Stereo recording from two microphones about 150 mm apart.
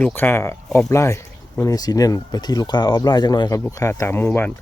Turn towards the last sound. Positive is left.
turn(degrees=15)  # may be behind; listen again after turning